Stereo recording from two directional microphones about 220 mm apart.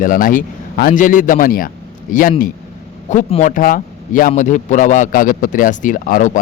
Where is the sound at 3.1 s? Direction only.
30° left (ahead or behind).